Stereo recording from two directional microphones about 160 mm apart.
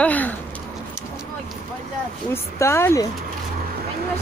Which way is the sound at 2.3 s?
15° left (ahead or behind).